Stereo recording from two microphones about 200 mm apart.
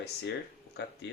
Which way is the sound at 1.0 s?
65° left (ahead or behind).